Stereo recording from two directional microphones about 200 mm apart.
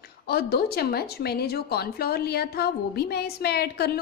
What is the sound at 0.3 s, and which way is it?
A woman's voice, 50° left (ahead or behind).